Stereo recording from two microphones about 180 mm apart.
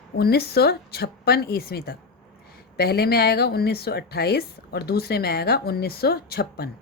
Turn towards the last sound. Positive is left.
turn(degrees=60)  # may be behind; listen again after turning